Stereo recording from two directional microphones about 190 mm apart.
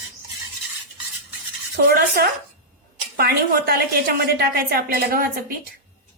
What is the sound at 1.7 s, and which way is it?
Cutlery, 50° right (ahead or behind).